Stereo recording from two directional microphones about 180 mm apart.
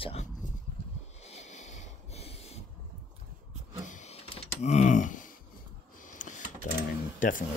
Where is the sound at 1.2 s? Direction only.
40° left (ahead or behind).